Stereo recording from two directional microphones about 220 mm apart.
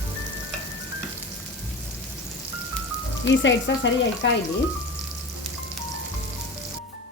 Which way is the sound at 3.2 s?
55° left (ahead or behind).